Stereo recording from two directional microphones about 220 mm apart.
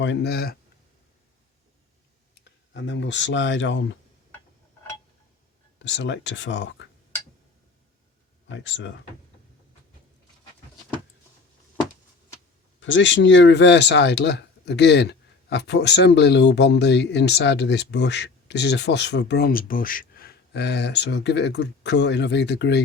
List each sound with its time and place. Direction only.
0.0 s speech: 50° left (ahead or behind)
2.4 s speech: 55° left (ahead or behind)
5.8 s speech: 55° left (ahead or behind)
8.5 s speech: 55° left (ahead or behind)
12.8 s speech: 55° left (ahead or behind)